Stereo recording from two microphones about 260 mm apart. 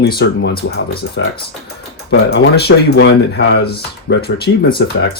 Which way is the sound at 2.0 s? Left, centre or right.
Left.